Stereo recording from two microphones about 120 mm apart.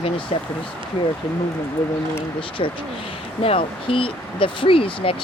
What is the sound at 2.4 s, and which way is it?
Speech, 45° left (ahead or behind).